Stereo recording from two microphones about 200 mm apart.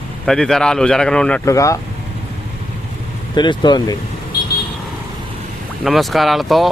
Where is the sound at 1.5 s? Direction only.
15° left (ahead or behind).